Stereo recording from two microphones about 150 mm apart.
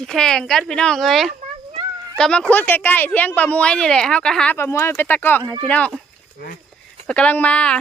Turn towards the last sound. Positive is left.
turn(degrees=10)  # may be behind; listen again after turning